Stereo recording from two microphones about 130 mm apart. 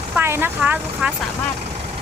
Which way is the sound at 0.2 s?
15° right (ahead or behind).